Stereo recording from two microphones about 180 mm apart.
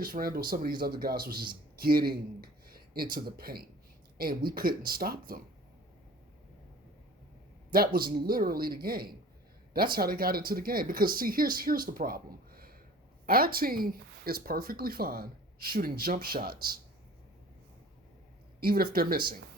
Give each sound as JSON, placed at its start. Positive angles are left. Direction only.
{"t": 0.0, "sound": "speech", "side_deg": -55}
{"t": 7.7, "sound": "speech", "side_deg": -55}
{"t": 18.6, "sound": "speech", "side_deg": -60}